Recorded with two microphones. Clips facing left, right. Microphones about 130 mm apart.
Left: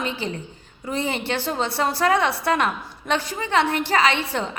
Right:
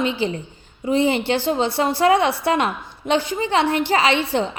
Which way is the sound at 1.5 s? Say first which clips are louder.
Right 2 dB; 25° right (ahead or behind).